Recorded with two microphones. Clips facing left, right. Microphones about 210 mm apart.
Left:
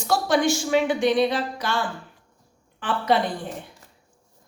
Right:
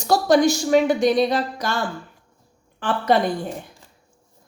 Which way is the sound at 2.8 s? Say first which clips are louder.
Right 3 dB; 45° right (ahead or behind).